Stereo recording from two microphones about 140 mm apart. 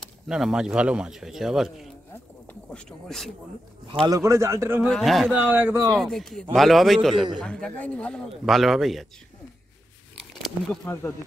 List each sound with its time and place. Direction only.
0.0 s speech: 5° right (ahead or behind)
4.0 s a man's voice: 25° right (ahead or behind)
4.8 s speech: centre (ahead or behind)
5.3 s speech: 10° right (ahead or behind)
5.9 s speech: centre (ahead or behind)
10.9 s speech: 15° left (ahead or behind)